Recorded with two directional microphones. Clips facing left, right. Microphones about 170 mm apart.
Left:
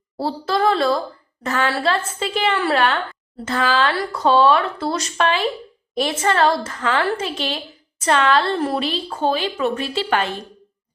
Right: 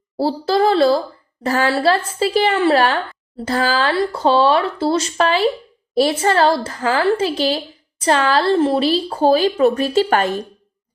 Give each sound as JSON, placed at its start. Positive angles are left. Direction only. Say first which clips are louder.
{"t": 0.2, "sound": "a woman's voice", "louder": "right 4 dB", "side_deg": -30}